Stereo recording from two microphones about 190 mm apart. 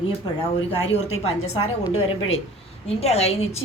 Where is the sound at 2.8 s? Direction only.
35° left (ahead or behind).